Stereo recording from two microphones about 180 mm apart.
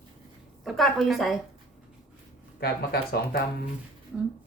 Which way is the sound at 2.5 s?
60° left (ahead or behind).